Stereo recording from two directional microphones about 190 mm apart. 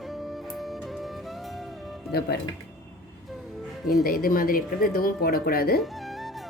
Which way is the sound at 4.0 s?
50° left (ahead or behind).